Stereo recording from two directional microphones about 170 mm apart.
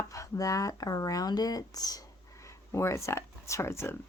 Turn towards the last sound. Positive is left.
turn(degrees=15)  # may be behind; listen again after turning